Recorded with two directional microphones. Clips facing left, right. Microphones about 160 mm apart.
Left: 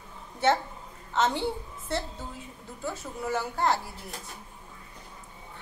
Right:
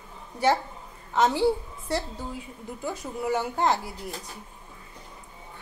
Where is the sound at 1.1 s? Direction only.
10° right (ahead or behind).